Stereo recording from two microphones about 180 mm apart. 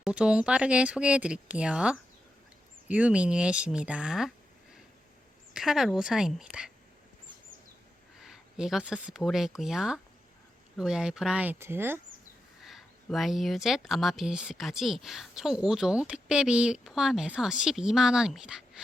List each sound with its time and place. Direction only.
0.0 s speech: 5° right (ahead or behind)
5.5 s speech: centre (ahead or behind)
8.2 s speech: 5° right (ahead or behind)
12.6 s speech: centre (ahead or behind)